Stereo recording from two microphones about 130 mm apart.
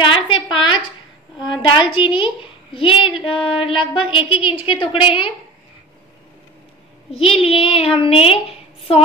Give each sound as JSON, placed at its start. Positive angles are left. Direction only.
{"t": 0.0, "sound": "a sound", "side_deg": 40}
{"t": 1.5, "sound": "a woman's voice", "side_deg": 40}
{"t": 7.1, "sound": "a woman's voice", "side_deg": 45}